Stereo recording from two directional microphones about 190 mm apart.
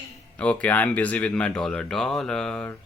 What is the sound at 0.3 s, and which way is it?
Speech, 5° left (ahead or behind).